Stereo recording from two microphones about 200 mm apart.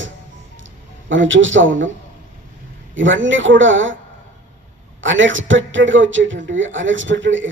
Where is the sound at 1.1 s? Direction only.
70° right (ahead or behind).